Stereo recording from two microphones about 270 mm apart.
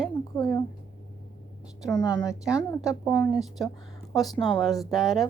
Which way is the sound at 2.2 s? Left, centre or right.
Centre.